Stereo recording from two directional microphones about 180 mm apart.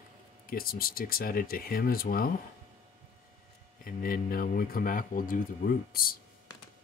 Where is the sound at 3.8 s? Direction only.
55° left (ahead or behind).